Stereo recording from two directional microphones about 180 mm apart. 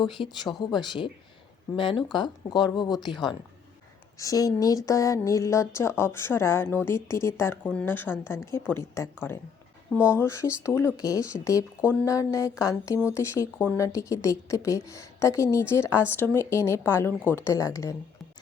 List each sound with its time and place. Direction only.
0.0 s a woman's voice: 25° left (ahead or behind)
10.2 s a woman's voice: 15° left (ahead or behind)